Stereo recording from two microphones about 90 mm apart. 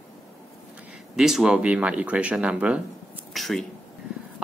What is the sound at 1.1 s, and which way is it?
Speech, 5° right (ahead or behind).